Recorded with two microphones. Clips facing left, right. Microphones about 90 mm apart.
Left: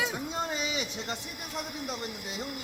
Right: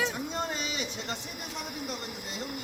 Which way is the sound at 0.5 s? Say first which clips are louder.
Left 2 dB; 10° left (ahead or behind).